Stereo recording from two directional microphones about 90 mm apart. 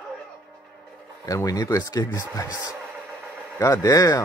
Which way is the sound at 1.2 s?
40° left (ahead or behind).